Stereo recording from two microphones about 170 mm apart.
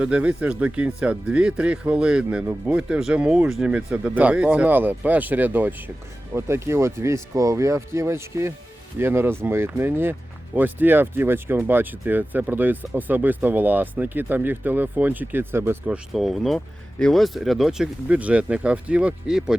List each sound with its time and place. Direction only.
0.0 s speech: 5° right (ahead or behind)
16.1 s speech: centre (ahead or behind)